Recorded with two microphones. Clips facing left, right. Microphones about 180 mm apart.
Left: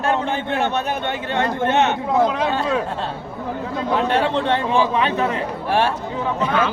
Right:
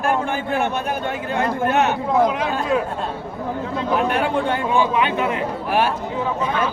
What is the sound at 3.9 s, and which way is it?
A man's voice, 25° left (ahead or behind).